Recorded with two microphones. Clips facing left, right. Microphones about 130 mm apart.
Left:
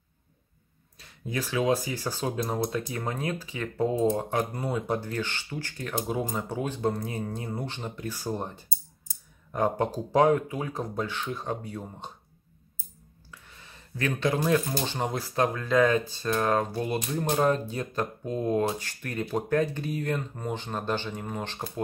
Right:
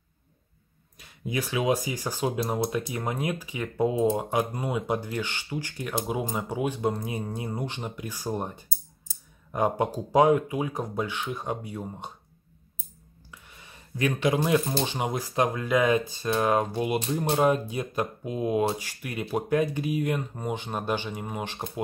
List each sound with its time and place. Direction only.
0.9 s speech: 15° right (ahead or behind)
13.3 s a sound: 15° right (ahead or behind)
14.9 s speech: 15° right (ahead or behind)